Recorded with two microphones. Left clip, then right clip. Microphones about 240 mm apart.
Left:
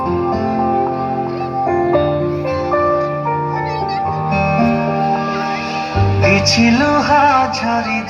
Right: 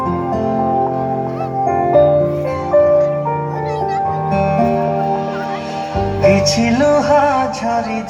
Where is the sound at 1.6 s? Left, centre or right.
Right.